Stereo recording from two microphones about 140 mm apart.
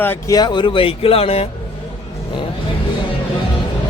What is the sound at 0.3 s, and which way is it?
A man's voice, 30° left (ahead or behind).